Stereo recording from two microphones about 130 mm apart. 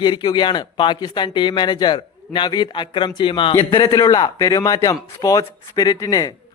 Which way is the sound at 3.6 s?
30° left (ahead or behind).